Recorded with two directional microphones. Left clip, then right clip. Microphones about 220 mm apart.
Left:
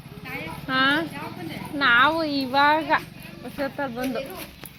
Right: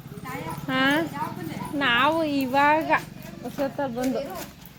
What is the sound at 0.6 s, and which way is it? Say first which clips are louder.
Speech: left 2 dB; 15° right (ahead or behind).